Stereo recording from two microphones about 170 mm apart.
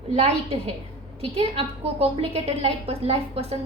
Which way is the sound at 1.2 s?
35° right (ahead or behind).